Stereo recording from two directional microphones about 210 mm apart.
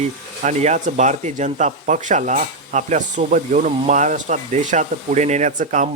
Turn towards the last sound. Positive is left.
turn(degrees=-35)  # may be behind; listen again after turning